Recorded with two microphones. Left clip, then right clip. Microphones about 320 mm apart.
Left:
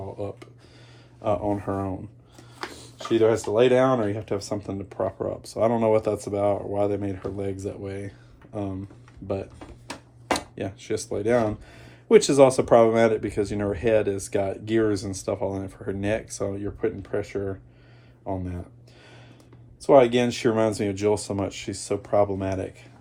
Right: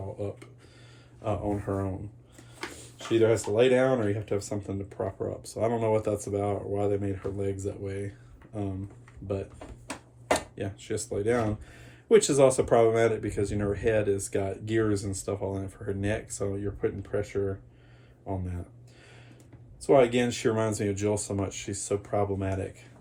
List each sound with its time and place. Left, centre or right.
1.2 s speech: left
3.0 s speech: left
9.2 s speech: left
19.8 s speech: left